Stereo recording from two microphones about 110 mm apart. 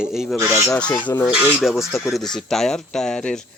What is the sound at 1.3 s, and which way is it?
Speech, 10° right (ahead or behind).